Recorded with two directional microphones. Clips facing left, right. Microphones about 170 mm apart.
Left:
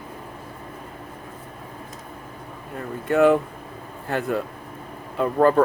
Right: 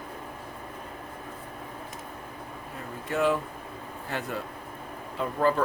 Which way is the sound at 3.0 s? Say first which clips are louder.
Left 9 dB; 60° left (ahead or behind).